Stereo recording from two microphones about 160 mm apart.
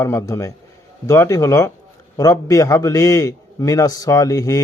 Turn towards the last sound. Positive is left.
turn(degrees=20)  # may be behind; listen again after turning